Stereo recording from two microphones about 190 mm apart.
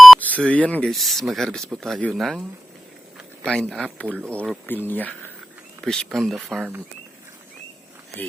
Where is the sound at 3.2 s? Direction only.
5° left (ahead or behind).